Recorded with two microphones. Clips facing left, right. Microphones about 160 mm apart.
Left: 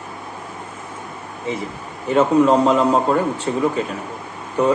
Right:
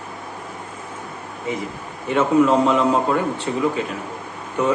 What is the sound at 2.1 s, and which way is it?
Speech, 35° left (ahead or behind).